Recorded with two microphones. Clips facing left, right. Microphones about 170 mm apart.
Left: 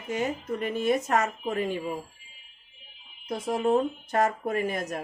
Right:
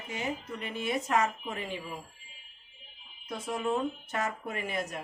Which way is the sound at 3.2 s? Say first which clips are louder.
Left 6 dB; 35° left (ahead or behind).